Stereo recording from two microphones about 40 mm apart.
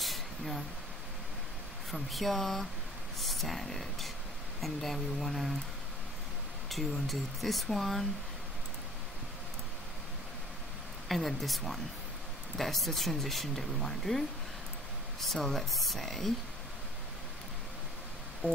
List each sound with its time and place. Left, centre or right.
0.0 s vehicle: centre
1.9 s speech: centre
6.7 s speech: centre
11.1 s speech: centre
18.4 s music: right